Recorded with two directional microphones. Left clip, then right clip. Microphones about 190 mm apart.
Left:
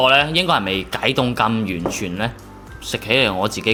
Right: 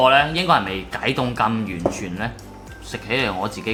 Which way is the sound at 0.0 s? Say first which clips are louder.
Left 1 dB; 35° left (ahead or behind).